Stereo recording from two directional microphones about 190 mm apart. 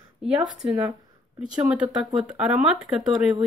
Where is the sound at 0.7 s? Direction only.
25° right (ahead or behind).